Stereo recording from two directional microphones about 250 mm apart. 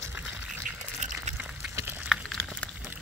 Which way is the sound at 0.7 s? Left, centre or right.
Right.